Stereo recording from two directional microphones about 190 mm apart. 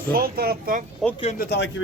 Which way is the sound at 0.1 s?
50° right (ahead or behind).